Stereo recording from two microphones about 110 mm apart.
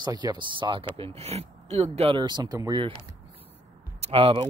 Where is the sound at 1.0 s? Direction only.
70° right (ahead or behind).